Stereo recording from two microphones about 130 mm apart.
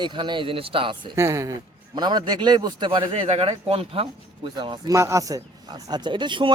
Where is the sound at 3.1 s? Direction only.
55° right (ahead or behind); by 4.9 s 35° right (ahead or behind).